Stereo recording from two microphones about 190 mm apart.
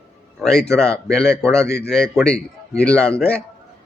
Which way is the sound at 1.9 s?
5° left (ahead or behind).